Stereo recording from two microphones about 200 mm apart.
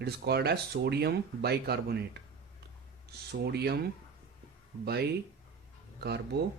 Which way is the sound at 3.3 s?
55° right (ahead or behind).